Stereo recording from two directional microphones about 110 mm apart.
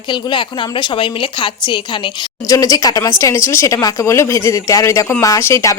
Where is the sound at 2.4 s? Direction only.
30° left (ahead or behind).